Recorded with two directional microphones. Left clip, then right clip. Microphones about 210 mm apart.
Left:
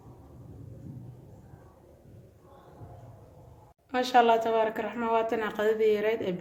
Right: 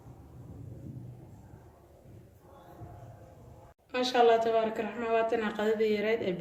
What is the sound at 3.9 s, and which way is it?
A woman's voice, 40° left (ahead or behind).